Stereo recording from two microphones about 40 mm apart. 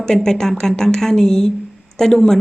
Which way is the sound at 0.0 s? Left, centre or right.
Centre.